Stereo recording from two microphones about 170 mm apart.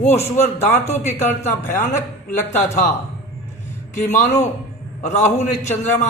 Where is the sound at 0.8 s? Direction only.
40° left (ahead or behind).